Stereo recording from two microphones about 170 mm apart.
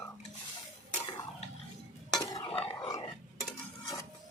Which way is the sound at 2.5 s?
25° left (ahead or behind).